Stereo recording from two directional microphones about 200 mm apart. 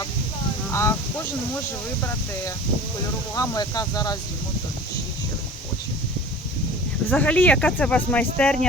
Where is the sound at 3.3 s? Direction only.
15° left (ahead or behind).